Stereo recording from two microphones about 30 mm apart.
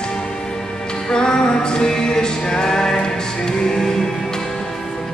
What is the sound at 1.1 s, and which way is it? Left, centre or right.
Music, left.